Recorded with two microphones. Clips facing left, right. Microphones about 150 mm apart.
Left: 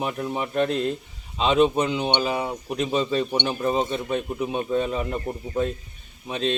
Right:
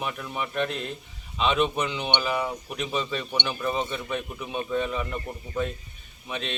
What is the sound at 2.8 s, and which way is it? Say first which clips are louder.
Speech: left 7 dB; 35° left (ahead or behind).